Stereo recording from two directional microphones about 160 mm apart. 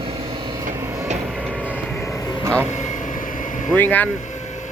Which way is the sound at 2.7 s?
50° left (ahead or behind).